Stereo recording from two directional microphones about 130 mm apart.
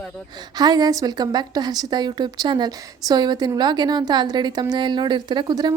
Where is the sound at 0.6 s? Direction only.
30° right (ahead or behind).